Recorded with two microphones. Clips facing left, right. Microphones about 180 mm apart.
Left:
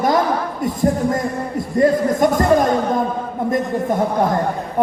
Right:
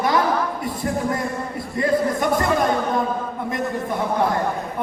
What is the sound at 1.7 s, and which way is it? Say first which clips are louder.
Speech: left 5 dB; 45° left (ahead or behind).